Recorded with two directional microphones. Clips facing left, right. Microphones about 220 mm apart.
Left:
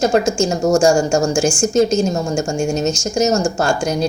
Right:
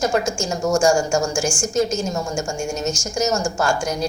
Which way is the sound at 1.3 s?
20° left (ahead or behind).